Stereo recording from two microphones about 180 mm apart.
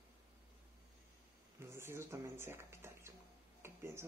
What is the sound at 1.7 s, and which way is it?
Speech, 15° right (ahead or behind).